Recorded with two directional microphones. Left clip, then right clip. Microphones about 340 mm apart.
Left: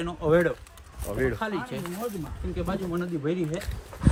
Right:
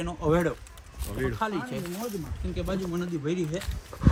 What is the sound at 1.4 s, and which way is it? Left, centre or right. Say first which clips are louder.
Speech: right 1 dB; centre.